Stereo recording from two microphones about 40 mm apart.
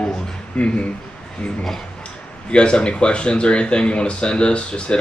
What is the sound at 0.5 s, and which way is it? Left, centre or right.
Speech, left.